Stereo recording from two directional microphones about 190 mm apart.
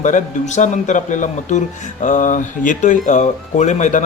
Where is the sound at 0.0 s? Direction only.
40° left (ahead or behind).